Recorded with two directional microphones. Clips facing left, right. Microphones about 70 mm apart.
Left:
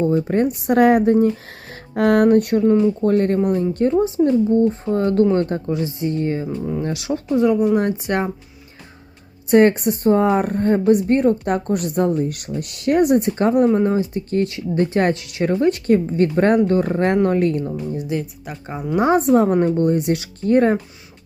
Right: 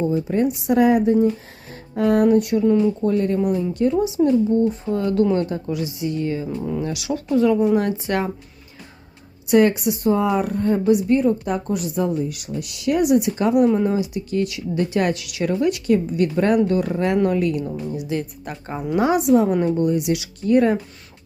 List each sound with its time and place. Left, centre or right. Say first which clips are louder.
0.0 s a woman's voice: left 2 dB; left
4.2 s speech: left 1 dB; left
5.6 s speech: left 3 dB; left
9.5 s a woman's voice: left 2 dB; left
18.2 s speech: even; centre
18.9 s a woman's voice: left 2 dB; left